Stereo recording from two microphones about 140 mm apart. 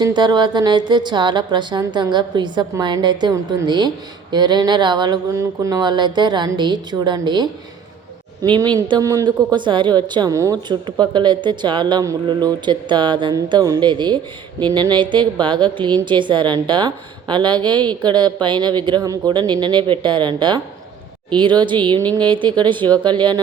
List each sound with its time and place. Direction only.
0.0 s speech: 30° right (ahead or behind)